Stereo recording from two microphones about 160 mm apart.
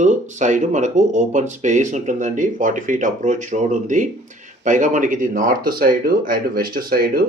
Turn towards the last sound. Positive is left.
turn(degrees=-65)  # may be behind; listen again after turning